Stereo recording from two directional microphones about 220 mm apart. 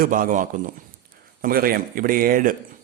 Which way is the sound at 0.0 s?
40° right (ahead or behind).